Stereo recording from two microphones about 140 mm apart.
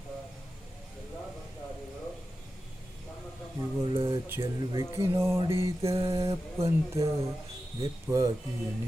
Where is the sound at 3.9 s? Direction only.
40° right (ahead or behind).